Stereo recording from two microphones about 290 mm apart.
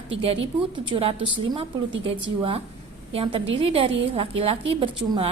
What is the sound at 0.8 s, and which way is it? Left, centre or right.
Speech, centre.